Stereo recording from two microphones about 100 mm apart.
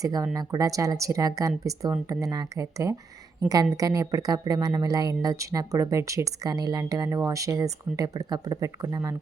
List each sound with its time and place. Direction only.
0.0 s speech: 35° right (ahead or behind)